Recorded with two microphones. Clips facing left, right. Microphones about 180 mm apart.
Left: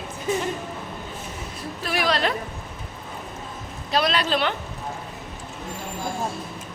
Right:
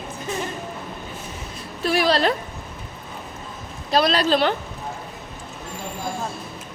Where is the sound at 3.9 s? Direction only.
35° right (ahead or behind).